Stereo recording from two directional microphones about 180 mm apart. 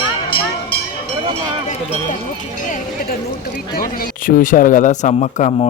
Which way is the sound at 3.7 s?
50° left (ahead or behind).